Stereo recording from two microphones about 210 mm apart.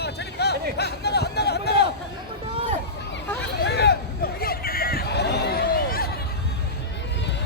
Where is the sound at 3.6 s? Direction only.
50° left (ahead or behind).